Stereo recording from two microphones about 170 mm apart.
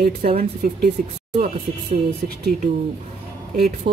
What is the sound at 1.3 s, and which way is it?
Speech, 45° right (ahead or behind).